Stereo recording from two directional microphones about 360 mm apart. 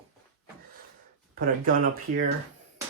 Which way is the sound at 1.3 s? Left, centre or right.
Right.